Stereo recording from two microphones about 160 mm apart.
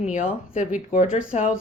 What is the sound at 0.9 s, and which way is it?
Speech, 45° left (ahead or behind).